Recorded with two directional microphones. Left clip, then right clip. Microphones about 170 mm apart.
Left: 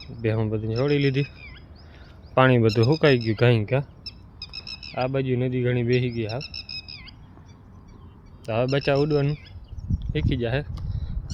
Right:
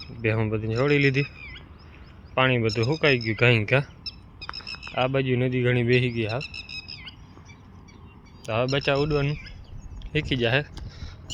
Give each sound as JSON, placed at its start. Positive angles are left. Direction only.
{"t": 0.2, "sound": "speech", "side_deg": 20}
{"t": 2.3, "sound": "speech", "side_deg": 55}
{"t": 3.6, "sound": "speech", "side_deg": 10}
{"t": 4.4, "sound": "bird", "side_deg": 25}
{"t": 4.9, "sound": "speech", "side_deg": 5}
{"t": 6.7, "sound": "bird", "side_deg": 30}
{"t": 8.4, "sound": "speech", "side_deg": 35}
{"t": 10.1, "sound": "speech", "side_deg": 5}
{"t": 10.9, "sound": "vehicle", "side_deg": 0}